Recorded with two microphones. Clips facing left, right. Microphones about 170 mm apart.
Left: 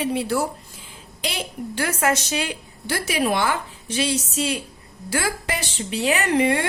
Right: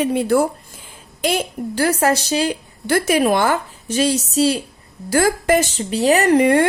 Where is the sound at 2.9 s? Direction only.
50° right (ahead or behind).